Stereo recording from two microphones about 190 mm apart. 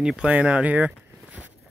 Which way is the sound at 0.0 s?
5° right (ahead or behind).